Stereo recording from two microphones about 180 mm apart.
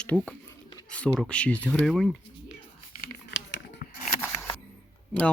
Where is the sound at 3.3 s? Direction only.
80° left.